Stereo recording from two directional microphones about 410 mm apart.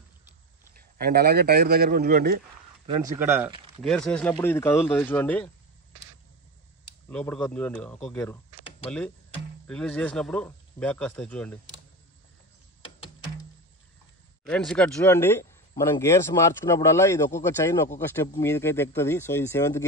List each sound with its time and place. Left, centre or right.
0.7 s a man's voice: right
2.9 s speech: centre
7.1 s speech: centre
8.5 s computer keyboard: centre
9.7 s speech: centre
14.4 s speech: centre